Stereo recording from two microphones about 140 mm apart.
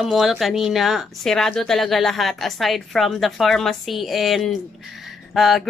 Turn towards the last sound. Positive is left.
turn(degrees=0)  # may be behind; listen again after turning